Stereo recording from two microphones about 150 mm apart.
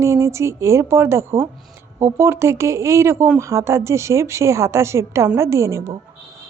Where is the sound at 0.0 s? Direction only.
20° right (ahead or behind).